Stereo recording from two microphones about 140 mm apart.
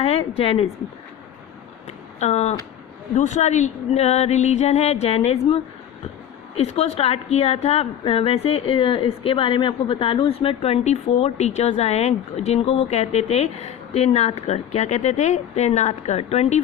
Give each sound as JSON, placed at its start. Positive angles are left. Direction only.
{"t": 0.0, "sound": "a woman's voice", "side_deg": 45}
{"t": 2.1, "sound": "a woman's voice", "side_deg": 50}
{"t": 6.6, "sound": "a woman's voice", "side_deg": 50}